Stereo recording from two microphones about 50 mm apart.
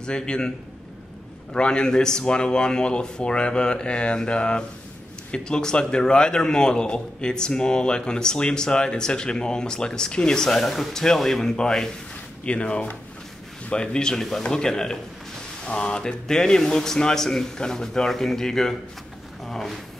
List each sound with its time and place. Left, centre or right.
0.0 s a man's voice: centre
1.5 s a man's voice: centre
12.4 s a man's voice: left; by 19.8 s centre